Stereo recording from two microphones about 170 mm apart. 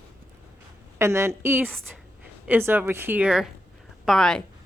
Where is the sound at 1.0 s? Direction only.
15° right (ahead or behind).